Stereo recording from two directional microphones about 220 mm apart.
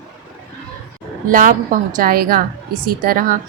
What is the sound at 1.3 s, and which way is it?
A woman's voice, 40° right (ahead or behind).